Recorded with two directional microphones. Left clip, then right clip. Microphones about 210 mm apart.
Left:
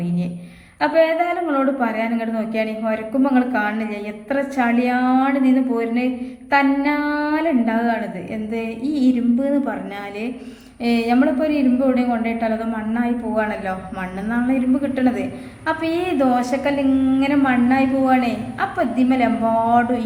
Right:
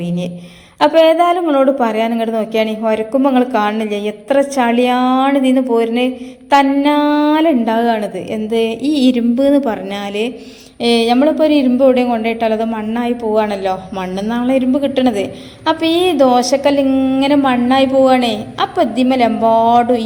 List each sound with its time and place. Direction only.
0.8 s a woman's voice: 30° right (ahead or behind)
10.8 s a woman's voice: 30° right (ahead or behind)